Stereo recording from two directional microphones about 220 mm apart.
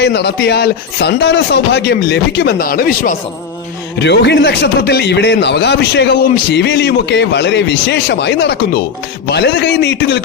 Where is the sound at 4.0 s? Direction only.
50° left (ahead or behind).